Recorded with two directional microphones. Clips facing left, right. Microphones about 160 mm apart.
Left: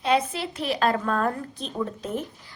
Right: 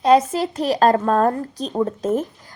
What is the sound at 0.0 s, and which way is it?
Speech, 40° right (ahead or behind).